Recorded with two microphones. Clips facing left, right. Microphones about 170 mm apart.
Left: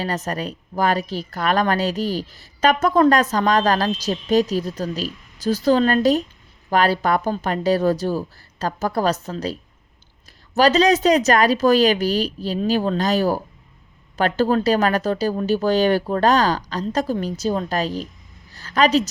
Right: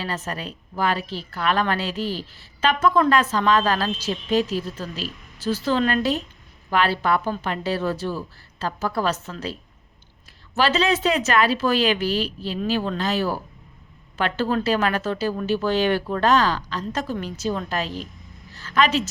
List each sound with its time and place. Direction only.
0.0 s a woman's voice: 40° left (ahead or behind)